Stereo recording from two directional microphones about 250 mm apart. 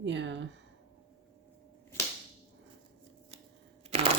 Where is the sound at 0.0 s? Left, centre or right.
Right.